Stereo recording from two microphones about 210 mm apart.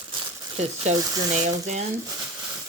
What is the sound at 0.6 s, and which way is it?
Speech, 35° right (ahead or behind).